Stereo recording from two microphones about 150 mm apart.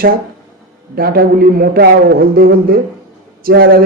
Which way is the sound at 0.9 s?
85° right.